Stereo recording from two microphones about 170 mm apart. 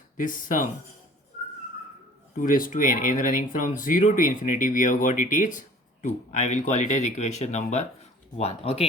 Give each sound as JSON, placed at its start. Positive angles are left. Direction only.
{"t": 0.2, "sound": "speech", "side_deg": 50}
{"t": 2.3, "sound": "speech", "side_deg": 50}